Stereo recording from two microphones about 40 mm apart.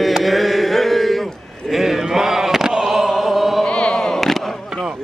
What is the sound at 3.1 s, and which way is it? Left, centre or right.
Opera, centre.